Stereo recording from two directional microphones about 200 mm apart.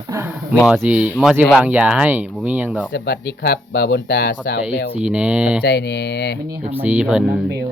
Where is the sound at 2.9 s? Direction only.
55° left (ahead or behind).